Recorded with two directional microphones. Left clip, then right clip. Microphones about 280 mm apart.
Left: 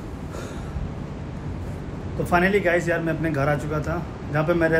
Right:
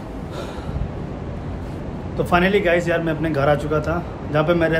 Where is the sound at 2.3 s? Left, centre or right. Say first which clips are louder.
Right 3 dB; centre.